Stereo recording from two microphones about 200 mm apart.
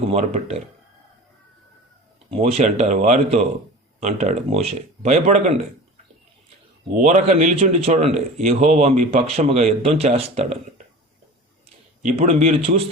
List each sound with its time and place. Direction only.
0.1 s a man's voice: 30° right (ahead or behind)
2.3 s a man's voice: 30° right (ahead or behind)
6.9 s a man's voice: 35° right (ahead or behind)
12.0 s a man's voice: 35° right (ahead or behind)